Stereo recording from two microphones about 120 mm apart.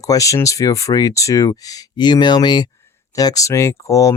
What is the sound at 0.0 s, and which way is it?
Speech, 30° left (ahead or behind).